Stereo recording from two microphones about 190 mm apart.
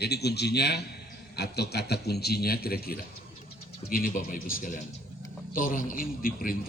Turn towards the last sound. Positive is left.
turn(degrees=50)  # may be behind; listen again after turning